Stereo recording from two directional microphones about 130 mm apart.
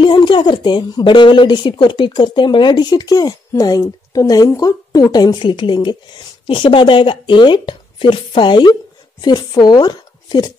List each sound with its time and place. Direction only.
0.0 s a woman's voice: 40° left (ahead or behind)